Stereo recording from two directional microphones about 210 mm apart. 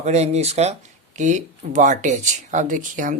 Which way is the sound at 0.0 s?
30° right (ahead or behind).